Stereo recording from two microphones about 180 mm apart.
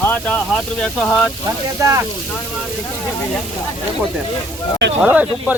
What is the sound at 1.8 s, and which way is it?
Speech, 15° right (ahead or behind).